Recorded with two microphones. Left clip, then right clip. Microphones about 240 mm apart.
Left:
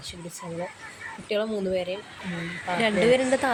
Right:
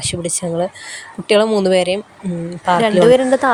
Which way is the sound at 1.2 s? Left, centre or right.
Right.